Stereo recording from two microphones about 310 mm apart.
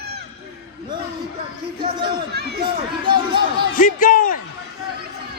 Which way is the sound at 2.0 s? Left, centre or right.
Right.